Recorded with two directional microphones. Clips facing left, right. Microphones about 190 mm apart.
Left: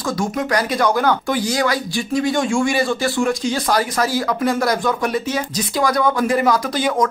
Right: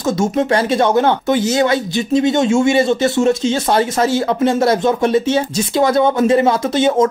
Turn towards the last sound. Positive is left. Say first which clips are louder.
# right 5 dB
turn(degrees=-25)  # may be behind; listen again after turning